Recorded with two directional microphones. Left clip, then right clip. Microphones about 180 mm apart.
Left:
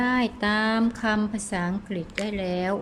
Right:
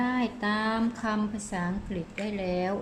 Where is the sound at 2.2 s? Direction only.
30° left (ahead or behind).